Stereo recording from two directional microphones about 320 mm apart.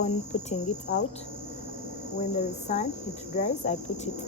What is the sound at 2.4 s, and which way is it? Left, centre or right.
Cricket, left.